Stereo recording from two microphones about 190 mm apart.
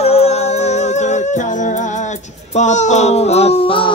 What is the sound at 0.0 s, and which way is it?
Music, 35° left (ahead or behind).